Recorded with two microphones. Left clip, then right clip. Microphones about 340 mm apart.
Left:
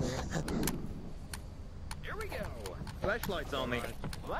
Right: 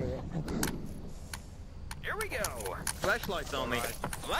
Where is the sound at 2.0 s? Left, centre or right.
Centre.